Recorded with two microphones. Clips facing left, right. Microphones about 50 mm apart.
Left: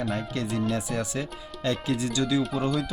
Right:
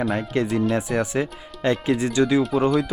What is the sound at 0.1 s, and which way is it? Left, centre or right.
Speech, right.